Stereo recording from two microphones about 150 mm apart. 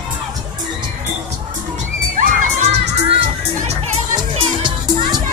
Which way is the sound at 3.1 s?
40° right (ahead or behind).